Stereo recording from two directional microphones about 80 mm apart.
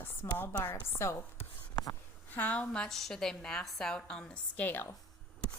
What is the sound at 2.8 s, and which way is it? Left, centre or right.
A woman's voice, centre.